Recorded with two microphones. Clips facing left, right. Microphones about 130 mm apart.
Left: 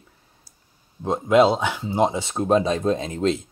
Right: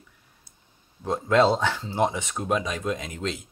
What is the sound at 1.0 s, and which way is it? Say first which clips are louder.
Speech: left 4 dB; 15° left (ahead or behind).